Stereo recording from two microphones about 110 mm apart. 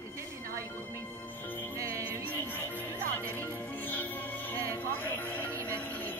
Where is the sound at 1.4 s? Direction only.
15° left (ahead or behind).